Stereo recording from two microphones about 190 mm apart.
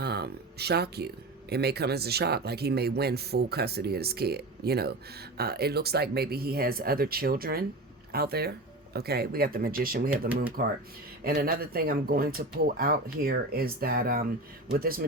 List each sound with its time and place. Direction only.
0.0 s speech: 60° right (ahead or behind)